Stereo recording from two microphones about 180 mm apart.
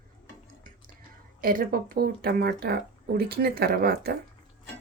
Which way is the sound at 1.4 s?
55° right (ahead or behind).